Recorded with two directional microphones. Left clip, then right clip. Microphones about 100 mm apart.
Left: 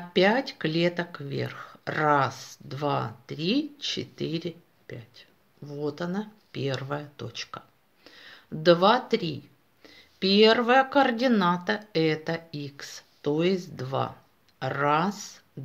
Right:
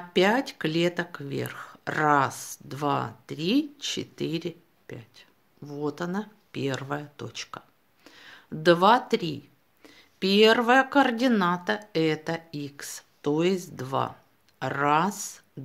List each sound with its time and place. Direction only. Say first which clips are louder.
0.1 s speech: even; 40° right (ahead or behind)
5.7 s speech: even; 60° right (ahead or behind); by 15.4 s 40° right (ahead or behind)